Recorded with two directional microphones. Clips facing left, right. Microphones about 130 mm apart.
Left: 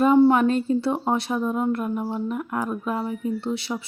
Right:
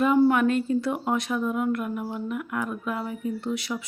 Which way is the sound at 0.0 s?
30° left (ahead or behind).